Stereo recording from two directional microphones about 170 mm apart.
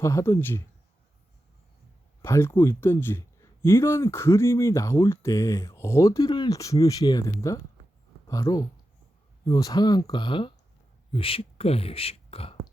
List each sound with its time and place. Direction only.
0.0 s speech: 15° left (ahead or behind)
2.2 s speech: 15° left (ahead or behind); by 12.5 s 35° left (ahead or behind)